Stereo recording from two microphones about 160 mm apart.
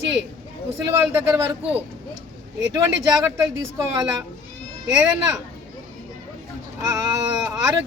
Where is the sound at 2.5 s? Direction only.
20° right (ahead or behind).